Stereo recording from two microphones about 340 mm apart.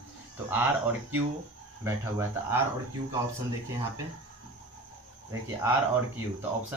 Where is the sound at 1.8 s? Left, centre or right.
Centre.